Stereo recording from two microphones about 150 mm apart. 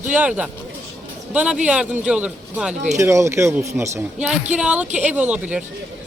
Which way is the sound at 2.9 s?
20° right (ahead or behind).